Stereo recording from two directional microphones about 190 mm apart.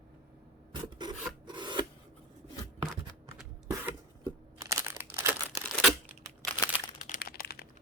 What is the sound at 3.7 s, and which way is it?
Crumpling, 20° right (ahead or behind).